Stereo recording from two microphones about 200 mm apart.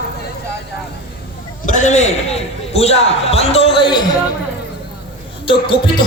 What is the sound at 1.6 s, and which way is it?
A man's voice, 40° left (ahead or behind).